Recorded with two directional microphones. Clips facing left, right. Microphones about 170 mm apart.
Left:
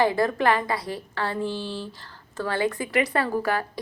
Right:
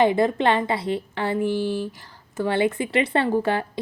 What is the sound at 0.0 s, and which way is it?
A woman's voice, 20° right (ahead or behind).